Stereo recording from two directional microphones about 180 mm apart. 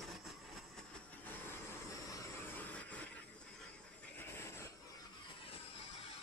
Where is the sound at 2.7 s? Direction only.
10° left (ahead or behind).